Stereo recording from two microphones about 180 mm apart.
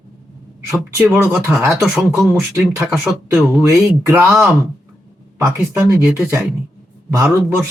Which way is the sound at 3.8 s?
15° right (ahead or behind).